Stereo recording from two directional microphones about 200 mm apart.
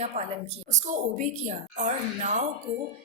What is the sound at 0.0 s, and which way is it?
A woman's voice, 35° right (ahead or behind).